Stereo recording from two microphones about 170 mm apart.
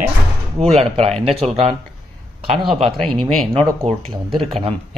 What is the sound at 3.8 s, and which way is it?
Speech, 35° right (ahead or behind).